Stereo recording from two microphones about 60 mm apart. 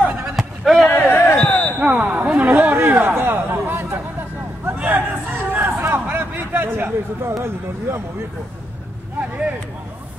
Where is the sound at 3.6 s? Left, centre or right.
Right.